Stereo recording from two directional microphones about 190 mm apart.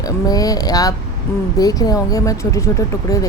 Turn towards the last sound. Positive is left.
turn(degrees=15)  # may be behind; listen again after turning